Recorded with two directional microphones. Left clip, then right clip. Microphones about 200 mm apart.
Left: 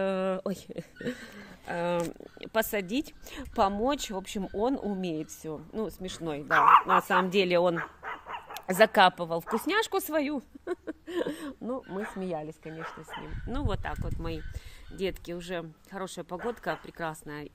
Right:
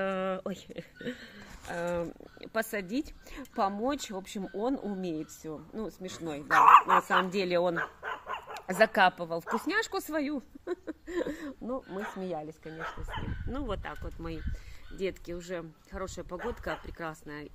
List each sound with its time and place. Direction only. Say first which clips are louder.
0.0 s a sound: left 3 dB; 45° left (ahead or behind)
1.7 s speech: left 3 dB; 45° left (ahead or behind)
6.4 s speech: right 1 dB; 15° right (ahead or behind)
7.0 s a woman's voice: left 2 dB; 45° left (ahead or behind)
7.7 s dog: right 1 dB; 55° right (ahead or behind)
8.5 s a woman's voice: left 3 dB; 45° left (ahead or behind)
13.1 s speech: left 1 dB; 60° right (ahead or behind)
13.5 s a woman's voice: left 3 dB; 50° left (ahead or behind)